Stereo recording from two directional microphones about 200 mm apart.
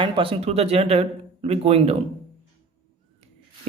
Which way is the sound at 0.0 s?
25° right (ahead or behind).